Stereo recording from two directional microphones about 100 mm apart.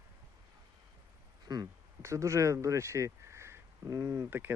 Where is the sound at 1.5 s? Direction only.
35° right (ahead or behind).